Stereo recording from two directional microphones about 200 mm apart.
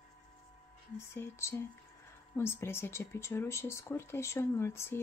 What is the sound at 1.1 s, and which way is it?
Speech, 15° left (ahead or behind).